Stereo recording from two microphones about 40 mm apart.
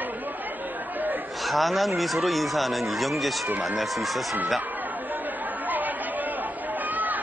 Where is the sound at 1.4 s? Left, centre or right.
Centre.